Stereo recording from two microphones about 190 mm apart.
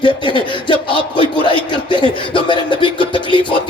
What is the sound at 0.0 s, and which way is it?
Speech, 25° left (ahead or behind).